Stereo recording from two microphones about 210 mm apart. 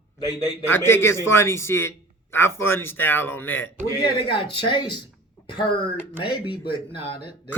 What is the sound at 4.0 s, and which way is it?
Speech, 25° left (ahead or behind).